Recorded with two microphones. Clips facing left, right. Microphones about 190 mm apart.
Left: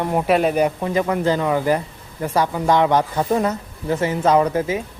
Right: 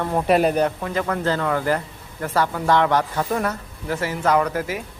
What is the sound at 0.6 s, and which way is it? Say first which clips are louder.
Speech: left 3 dB; 20° left (ahead or behind).